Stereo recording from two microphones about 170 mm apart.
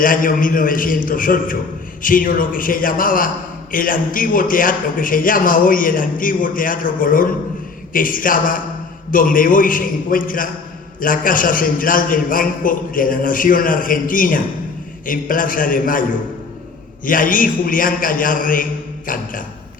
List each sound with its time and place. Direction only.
0.0 s a man's voice: 55° left (ahead or behind)
17.1 s a man's voice: 55° left (ahead or behind)